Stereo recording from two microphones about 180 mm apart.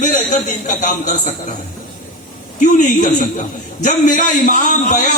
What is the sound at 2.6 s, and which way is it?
A man's voice, 45° left (ahead or behind).